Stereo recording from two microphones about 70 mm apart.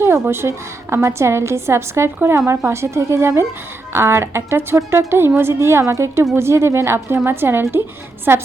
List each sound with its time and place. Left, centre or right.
0.0 s a woman's voice: right